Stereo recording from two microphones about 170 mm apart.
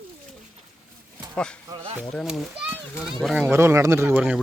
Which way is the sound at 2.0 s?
Centre (ahead or behind).